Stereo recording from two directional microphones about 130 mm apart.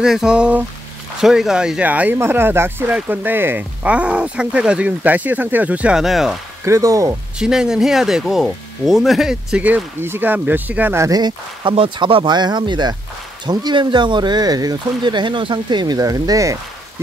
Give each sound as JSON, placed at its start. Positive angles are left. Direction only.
{"t": 0.0, "sound": "speech", "side_deg": -5}
{"t": 6.6, "sound": "speech", "side_deg": -25}
{"t": 7.3, "sound": "speech", "side_deg": -5}
{"t": 11.1, "sound": "speech", "side_deg": -35}
{"t": 11.7, "sound": "speech", "side_deg": -45}